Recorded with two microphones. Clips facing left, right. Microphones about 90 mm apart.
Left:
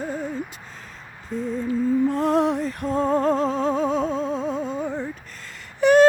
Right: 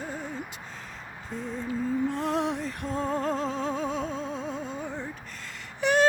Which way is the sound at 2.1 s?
40° left (ahead or behind).